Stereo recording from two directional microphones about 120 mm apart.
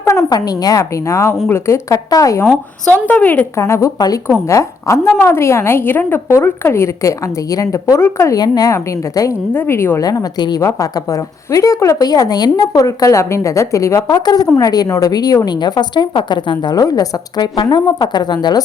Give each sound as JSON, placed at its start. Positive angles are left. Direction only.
{"t": 0.0, "sound": "a woman's voice", "side_deg": 25}
{"t": 2.9, "sound": "speech", "side_deg": 15}
{"t": 3.6, "sound": "a woman's voice", "side_deg": 25}
{"t": 10.0, "sound": "a woman's voice", "side_deg": 30}